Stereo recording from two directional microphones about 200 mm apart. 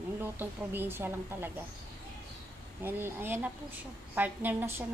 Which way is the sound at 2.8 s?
10° right (ahead or behind).